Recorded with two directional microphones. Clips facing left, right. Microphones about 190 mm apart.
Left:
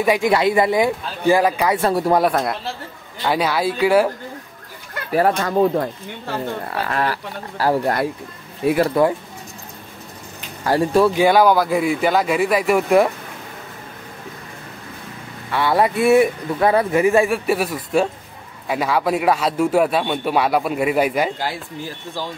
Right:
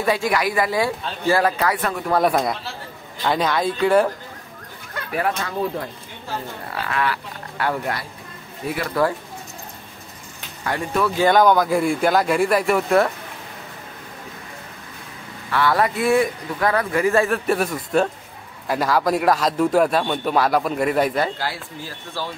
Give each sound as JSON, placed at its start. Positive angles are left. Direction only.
{"t": 0.0, "sound": "a man's voice", "side_deg": 15}
{"t": 1.8, "sound": "speech", "side_deg": 30}
{"t": 2.2, "sound": "a man's voice", "side_deg": 0}
{"t": 5.1, "sound": "speech", "side_deg": 40}
{"t": 5.6, "sound": "speech", "side_deg": 55}
{"t": 6.9, "sound": "speech", "side_deg": 40}
{"t": 8.6, "sound": "speech", "side_deg": 80}
{"t": 10.6, "sound": "speech", "side_deg": 35}
{"t": 11.1, "sound": "a man's voice", "side_deg": 5}
{"t": 15.5, "sound": "a man's voice", "side_deg": 20}